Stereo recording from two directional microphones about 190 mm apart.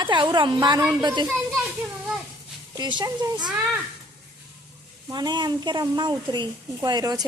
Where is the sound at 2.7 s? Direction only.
25° right (ahead or behind).